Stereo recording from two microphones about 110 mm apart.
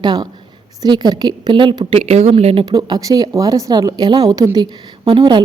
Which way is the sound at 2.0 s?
70° right (ahead or behind).